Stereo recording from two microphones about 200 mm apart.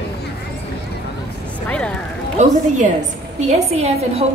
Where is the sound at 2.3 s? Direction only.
35° right (ahead or behind).